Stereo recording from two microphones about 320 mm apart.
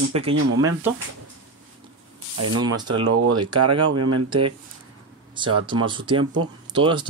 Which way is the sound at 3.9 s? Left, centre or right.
Right.